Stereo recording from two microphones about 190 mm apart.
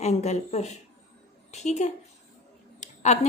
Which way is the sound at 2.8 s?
40° left (ahead or behind).